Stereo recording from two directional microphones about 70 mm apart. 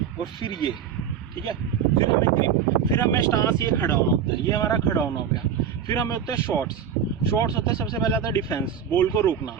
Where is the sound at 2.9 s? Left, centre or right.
Left.